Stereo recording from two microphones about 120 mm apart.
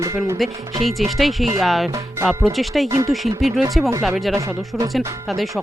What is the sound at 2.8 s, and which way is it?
Speech, 25° right (ahead or behind).